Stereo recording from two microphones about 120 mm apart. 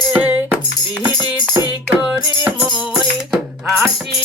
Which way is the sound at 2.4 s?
10° right (ahead or behind).